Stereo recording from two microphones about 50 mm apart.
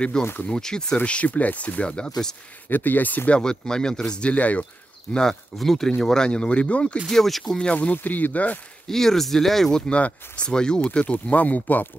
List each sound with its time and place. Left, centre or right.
0.2 s speech: left
0.5 s speech: centre
0.9 s speech: left
2.7 s speech: left
3.3 s speech: centre
4.3 s speech: left
5.1 s speech: centre
7.1 s speech: centre
7.5 s speech: left
7.9 s speech: left
8.8 s speech: centre
10.8 s speech: left